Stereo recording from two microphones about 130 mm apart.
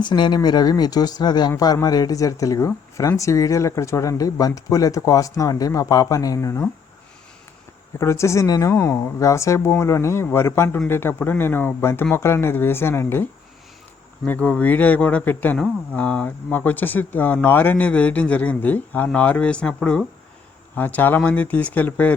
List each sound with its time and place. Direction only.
0.0 s speech: 35° left (ahead or behind)
7.9 s speech: 20° left (ahead or behind)
14.3 s speech: 10° left (ahead or behind)